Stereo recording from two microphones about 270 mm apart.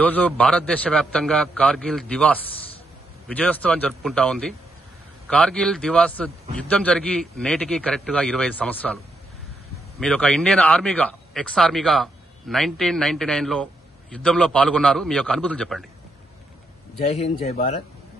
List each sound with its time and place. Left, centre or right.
0.0 s speech: centre
17.1 s speech: left